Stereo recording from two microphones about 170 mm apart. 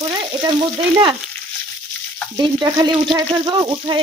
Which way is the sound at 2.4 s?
25° right (ahead or behind).